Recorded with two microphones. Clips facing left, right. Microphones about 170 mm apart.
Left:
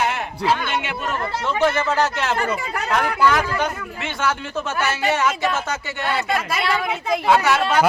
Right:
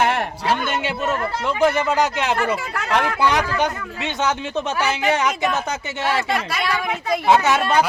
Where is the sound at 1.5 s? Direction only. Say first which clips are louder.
Right 1 dB; 15° right (ahead or behind).